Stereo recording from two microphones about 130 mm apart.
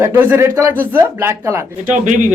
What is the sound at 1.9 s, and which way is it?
Speech, 75° right (ahead or behind).